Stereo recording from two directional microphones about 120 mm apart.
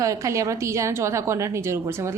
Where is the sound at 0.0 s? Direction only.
25° right (ahead or behind).